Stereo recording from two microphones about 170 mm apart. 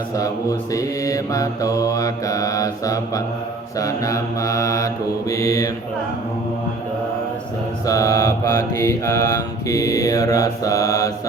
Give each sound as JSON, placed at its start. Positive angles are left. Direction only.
{"t": 0.2, "sound": "mantra", "side_deg": 20}
{"t": 7.9, "sound": "mantra", "side_deg": 20}